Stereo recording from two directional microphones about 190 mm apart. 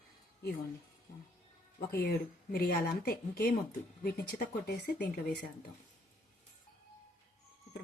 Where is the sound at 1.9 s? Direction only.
55° left (ahead or behind).